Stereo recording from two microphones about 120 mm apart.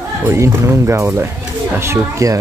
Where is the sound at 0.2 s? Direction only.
20° right (ahead or behind).